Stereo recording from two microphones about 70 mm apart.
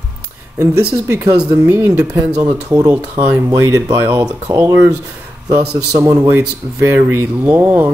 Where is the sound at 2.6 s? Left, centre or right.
Right.